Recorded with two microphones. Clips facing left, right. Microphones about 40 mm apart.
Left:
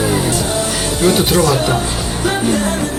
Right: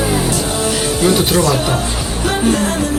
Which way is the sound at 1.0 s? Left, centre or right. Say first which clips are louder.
Left 1 dB; centre.